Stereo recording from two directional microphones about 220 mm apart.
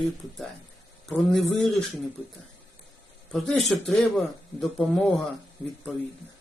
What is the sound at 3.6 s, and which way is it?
Speech, centre (ahead or behind).